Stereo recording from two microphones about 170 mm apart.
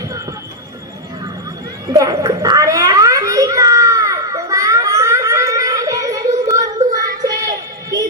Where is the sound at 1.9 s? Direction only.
20° right (ahead or behind).